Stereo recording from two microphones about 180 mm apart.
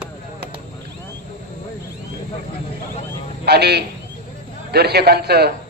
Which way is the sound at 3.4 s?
65° right (ahead or behind).